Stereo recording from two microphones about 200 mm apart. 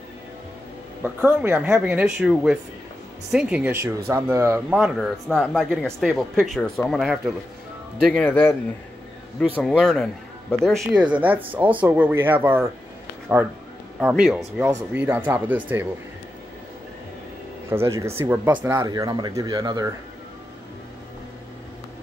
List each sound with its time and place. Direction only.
1.0 s speech: 5° right (ahead or behind)
9.6 s speech: centre (ahead or behind)
13.9 s speech: 5° right (ahead or behind)
17.6 s speech: 15° right (ahead or behind)
18.8 s speech: 20° right (ahead or behind)